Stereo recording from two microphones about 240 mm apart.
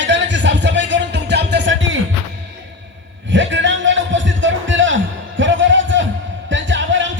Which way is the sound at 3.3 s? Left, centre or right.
Right.